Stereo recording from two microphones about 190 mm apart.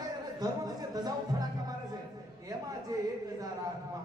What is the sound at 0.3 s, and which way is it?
Speech, 20° right (ahead or behind).